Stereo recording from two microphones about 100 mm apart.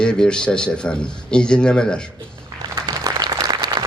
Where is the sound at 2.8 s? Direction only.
40° right (ahead or behind).